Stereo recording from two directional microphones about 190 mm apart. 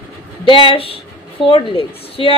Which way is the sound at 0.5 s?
25° left (ahead or behind).